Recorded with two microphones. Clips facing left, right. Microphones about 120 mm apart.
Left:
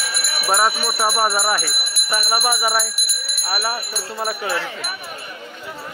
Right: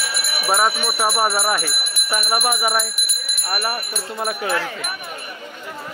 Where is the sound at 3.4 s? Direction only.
5° left (ahead or behind).